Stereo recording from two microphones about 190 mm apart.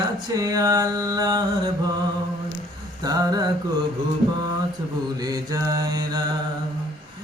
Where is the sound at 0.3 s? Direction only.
20° right (ahead or behind).